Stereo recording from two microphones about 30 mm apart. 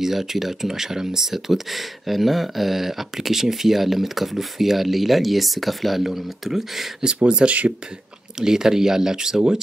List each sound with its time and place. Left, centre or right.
0.0 s speech: centre
7.4 s speech: right
8.4 s speech: right